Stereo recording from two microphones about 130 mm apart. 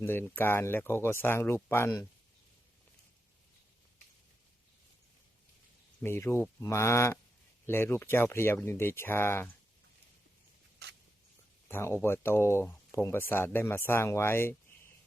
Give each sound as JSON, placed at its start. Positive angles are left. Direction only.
{"t": 0.0, "sound": "speech", "side_deg": 15}
{"t": 6.0, "sound": "speech", "side_deg": 20}
{"t": 11.7, "sound": "speech", "side_deg": 20}